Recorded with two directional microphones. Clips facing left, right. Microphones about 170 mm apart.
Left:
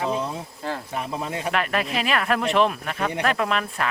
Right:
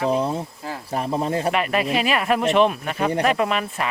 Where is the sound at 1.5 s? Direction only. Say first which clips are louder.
Right 4 dB; centre (ahead or behind).